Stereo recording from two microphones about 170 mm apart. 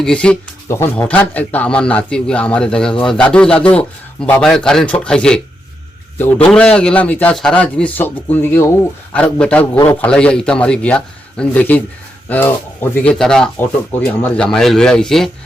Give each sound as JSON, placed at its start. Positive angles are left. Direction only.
{"t": 0.0, "sound": "a man's voice", "side_deg": 5}
{"t": 9.7, "sound": "a man's voice", "side_deg": 20}
{"t": 10.0, "sound": "a man's voice", "side_deg": 5}